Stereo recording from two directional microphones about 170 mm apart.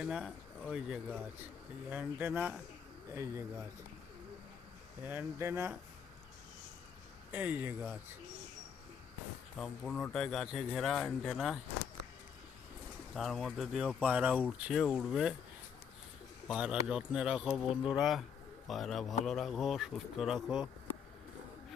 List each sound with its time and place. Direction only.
0.0 s speech: 5° right (ahead or behind)
5.0 s speech: 15° right (ahead or behind)
7.3 s speech: 10° right (ahead or behind)
9.6 s speech: centre (ahead or behind)
13.1 s speech: centre (ahead or behind)
16.5 s speech: 5° right (ahead or behind)